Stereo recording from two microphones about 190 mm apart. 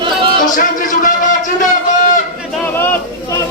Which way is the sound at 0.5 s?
45° left (ahead or behind).